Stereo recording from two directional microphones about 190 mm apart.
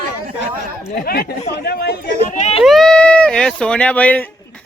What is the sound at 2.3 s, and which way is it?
Baby cry, 35° left (ahead or behind).